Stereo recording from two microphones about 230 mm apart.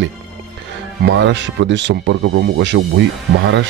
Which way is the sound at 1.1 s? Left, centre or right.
Right.